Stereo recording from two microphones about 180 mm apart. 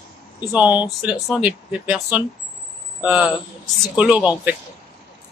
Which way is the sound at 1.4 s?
5° right (ahead or behind).